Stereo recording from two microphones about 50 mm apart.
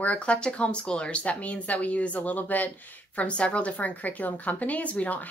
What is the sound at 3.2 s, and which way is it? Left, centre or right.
A woman's voice, left.